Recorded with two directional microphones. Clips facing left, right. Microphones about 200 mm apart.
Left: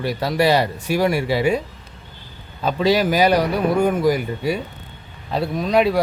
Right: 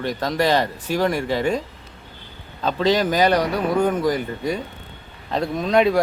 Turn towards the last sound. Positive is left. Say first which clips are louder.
# even
turn(degrees=5)  # may be behind; listen again after turning